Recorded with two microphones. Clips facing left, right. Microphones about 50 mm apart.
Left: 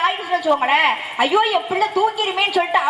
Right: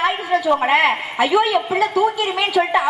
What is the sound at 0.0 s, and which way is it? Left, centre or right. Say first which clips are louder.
A woman's voice: right 1 dB; centre.